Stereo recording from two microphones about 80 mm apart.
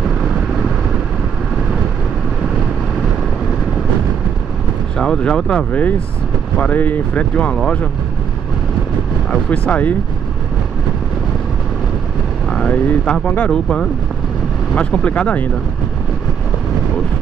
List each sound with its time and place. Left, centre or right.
4.9 s speech: centre
9.5 s speech: centre
12.4 s speech: centre